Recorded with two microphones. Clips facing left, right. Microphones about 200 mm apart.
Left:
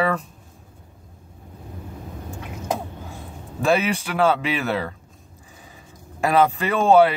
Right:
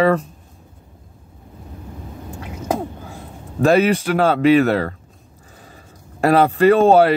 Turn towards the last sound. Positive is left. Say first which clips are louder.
# right 5 dB
turn(degrees=-40)  # may be behind; listen again after turning